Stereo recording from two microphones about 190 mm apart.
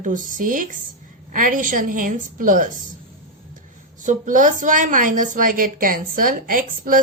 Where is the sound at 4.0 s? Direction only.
45° right (ahead or behind).